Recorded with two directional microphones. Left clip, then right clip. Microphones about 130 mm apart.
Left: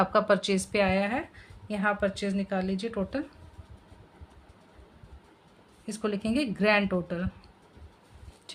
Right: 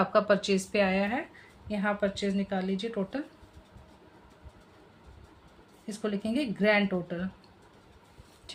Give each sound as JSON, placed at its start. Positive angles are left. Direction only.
{"t": 0.0, "sound": "speech", "side_deg": 40}
{"t": 5.8, "sound": "speech", "side_deg": 55}
{"t": 8.5, "sound": "a sound", "side_deg": 30}